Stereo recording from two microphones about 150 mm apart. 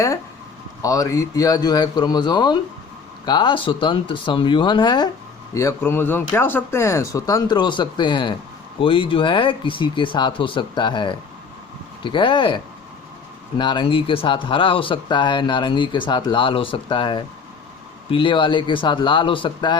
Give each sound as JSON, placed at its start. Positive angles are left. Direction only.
{"t": 0.8, "sound": "speech", "side_deg": 20}
{"t": 5.5, "sound": "speech", "side_deg": 20}